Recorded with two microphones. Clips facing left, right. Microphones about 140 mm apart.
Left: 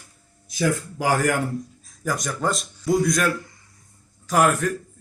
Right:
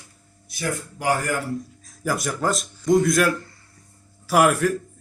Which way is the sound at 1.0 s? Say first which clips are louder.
Left 2 dB; 90° left.